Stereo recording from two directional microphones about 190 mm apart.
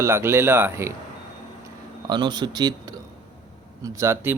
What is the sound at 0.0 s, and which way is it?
Speech, 15° right (ahead or behind).